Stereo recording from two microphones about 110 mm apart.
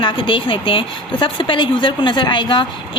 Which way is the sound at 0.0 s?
50° left (ahead or behind).